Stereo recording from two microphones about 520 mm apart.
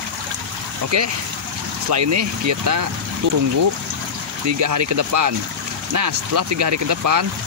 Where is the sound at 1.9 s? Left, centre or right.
Right.